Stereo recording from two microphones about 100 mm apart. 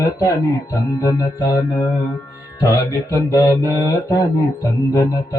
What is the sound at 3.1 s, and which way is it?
Music, 30° left (ahead or behind).